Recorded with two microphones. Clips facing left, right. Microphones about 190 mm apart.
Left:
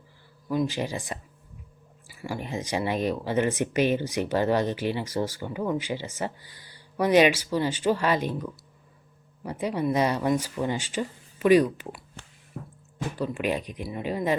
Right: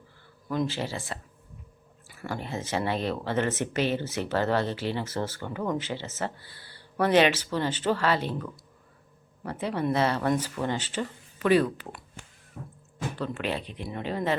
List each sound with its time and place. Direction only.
0.4 s speech: 10° left (ahead or behind)
2.2 s speech: 15° left (ahead or behind)
13.1 s speech: 10° left (ahead or behind)